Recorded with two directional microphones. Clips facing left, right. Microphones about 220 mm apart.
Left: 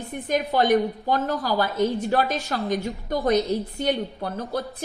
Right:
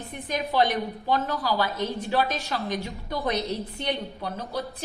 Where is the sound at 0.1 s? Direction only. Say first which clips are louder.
Left 5 dB; 45° left (ahead or behind).